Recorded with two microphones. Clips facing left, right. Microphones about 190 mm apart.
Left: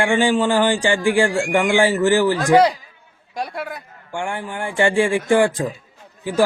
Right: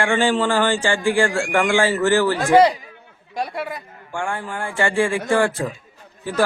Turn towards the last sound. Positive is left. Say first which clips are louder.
# left 3 dB
turn(degrees=15)  # may be behind; listen again after turning